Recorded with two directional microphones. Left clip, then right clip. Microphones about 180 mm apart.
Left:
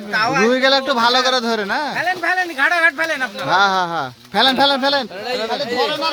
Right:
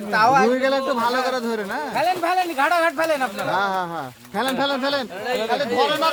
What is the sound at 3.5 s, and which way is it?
Speech, 50° left (ahead or behind).